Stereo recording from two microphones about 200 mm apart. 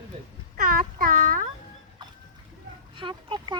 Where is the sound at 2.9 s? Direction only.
25° right (ahead or behind).